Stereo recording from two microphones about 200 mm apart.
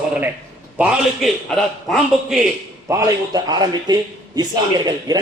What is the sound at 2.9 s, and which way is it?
Speech, 15° right (ahead or behind).